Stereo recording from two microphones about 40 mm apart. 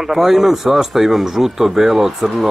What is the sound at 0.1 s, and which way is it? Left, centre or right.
Speech, centre.